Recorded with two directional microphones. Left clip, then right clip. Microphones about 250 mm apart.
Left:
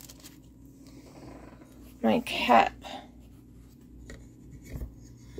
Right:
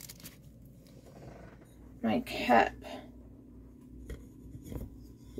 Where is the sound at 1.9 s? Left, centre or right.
Left.